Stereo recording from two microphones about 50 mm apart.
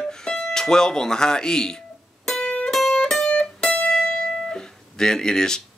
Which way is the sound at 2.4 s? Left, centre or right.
Centre.